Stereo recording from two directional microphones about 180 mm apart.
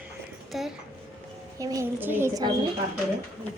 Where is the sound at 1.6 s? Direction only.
20° right (ahead or behind).